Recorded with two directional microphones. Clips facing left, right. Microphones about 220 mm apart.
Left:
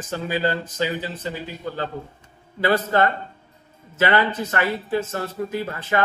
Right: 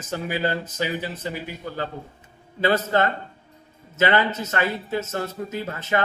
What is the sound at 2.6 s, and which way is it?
Speech, 20° right (ahead or behind).